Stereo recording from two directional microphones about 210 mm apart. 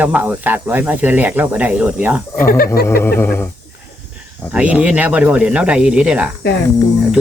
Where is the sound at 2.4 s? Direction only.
45° left (ahead or behind).